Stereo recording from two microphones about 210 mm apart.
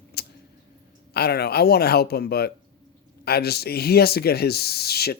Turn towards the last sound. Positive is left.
turn(degrees=50)  # may be behind; listen again after turning